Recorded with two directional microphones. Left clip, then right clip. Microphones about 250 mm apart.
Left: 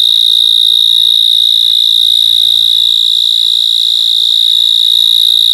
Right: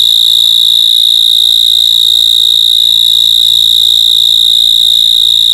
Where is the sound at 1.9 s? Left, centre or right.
Left.